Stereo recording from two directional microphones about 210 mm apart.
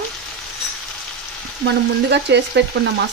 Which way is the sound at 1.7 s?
55° right (ahead or behind).